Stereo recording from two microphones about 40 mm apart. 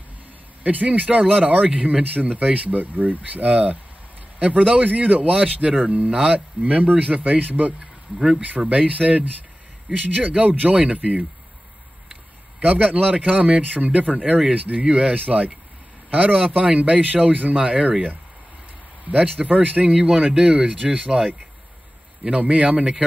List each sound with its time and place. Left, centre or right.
0.7 s speech: right
5.4 s speech: right
12.6 s speech: right
14.1 s speech: right
19.5 s speech: right
20.0 s speech: centre
20.6 s speech: right
22.3 s speech: right